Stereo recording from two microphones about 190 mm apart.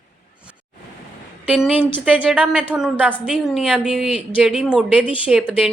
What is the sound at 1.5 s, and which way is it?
A woman's voice, 5° right (ahead or behind).